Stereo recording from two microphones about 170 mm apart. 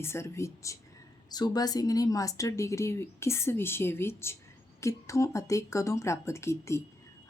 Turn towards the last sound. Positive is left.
turn(degrees=15)  # may be behind; listen again after turning